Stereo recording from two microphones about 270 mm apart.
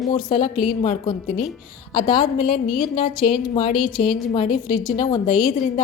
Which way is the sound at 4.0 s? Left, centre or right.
Left.